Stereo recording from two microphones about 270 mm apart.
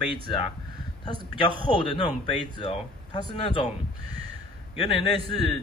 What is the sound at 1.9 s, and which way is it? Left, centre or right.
A man's voice, centre.